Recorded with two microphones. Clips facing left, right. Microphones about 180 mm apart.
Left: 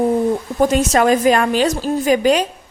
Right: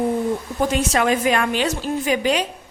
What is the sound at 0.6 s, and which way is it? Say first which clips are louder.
A woman's voice: left 6 dB; 45° left (ahead or behind).